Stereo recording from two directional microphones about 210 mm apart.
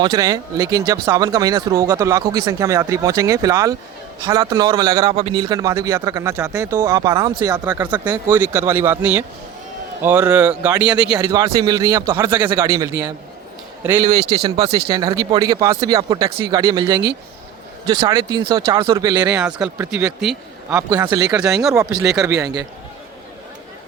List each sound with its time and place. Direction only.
0.0 s a man's voice: 20° right (ahead or behind)
11.2 s a man's voice: 15° right (ahead or behind)
19.3 s speech: 5° right (ahead or behind)
20.7 s a man's voice: 20° right (ahead or behind)
21.4 s speech: centre (ahead or behind)